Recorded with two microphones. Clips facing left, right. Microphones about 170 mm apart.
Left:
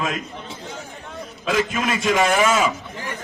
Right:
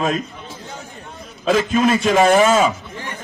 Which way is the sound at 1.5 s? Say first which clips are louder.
Right 6 dB; 35° right (ahead or behind).